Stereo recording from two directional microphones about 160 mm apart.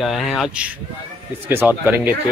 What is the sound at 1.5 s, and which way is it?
Speech, 15° right (ahead or behind).